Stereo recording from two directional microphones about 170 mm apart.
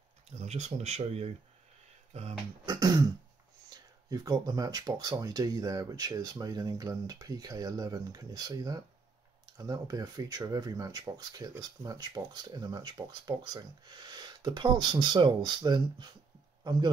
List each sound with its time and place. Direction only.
0.4 s speech: 40° right (ahead or behind)
2.6 s speech: 25° right (ahead or behind)